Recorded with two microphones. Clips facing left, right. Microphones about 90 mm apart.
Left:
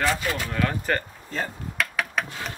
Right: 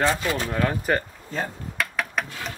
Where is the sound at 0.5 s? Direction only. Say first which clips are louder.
Right 2 dB; 20° right (ahead or behind).